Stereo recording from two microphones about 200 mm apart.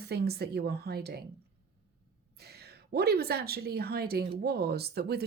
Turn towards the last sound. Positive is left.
turn(degrees=-50)  # may be behind; listen again after turning